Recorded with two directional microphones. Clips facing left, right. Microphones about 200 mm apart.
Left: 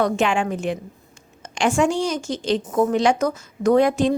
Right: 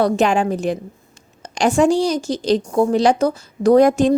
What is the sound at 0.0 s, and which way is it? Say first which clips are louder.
A woman's voice: right 4 dB; 40° right (ahead or behind).